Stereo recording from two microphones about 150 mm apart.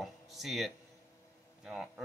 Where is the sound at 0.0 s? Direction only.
Centre (ahead or behind).